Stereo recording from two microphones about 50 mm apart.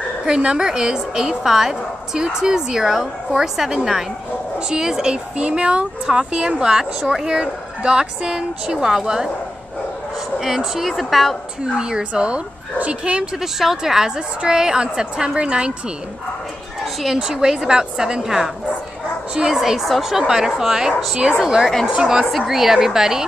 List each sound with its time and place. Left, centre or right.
0.2 s speech: centre
10.4 s a woman's voice: centre
11.7 s speech: centre
13.4 s speech: centre
16.8 s speech: centre